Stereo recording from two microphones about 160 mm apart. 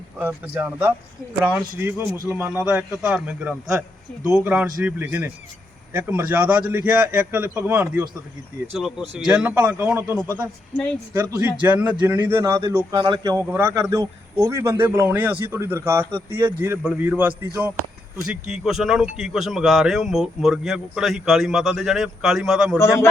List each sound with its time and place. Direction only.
0.2 s a man's voice: 10° right (ahead or behind)